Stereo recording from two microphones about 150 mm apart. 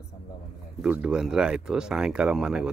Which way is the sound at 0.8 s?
10° right (ahead or behind).